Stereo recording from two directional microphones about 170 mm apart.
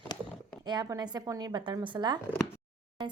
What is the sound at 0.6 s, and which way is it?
Speech, 25° right (ahead or behind).